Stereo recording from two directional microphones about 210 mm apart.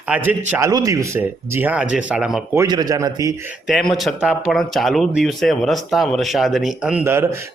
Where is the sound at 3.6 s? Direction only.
Centre (ahead or behind).